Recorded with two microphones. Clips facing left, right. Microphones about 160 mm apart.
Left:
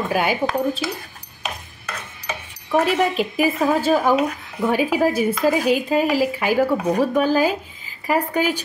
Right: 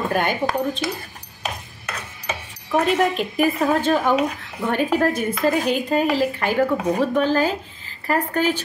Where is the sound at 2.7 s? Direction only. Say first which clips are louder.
Even; 5° left (ahead or behind).